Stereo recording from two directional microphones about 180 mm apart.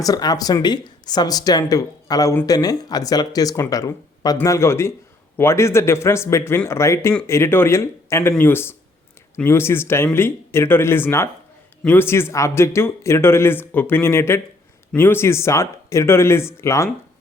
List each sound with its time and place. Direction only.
0.0 s speech: 20° left (ahead or behind)